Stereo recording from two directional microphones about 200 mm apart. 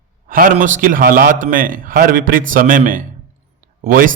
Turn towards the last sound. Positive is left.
turn(degrees=-45)  # may be behind; listen again after turning